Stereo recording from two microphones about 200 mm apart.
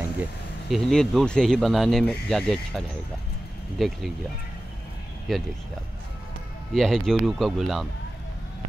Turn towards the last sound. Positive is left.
turn(degrees=0)  # may be behind; listen again after turning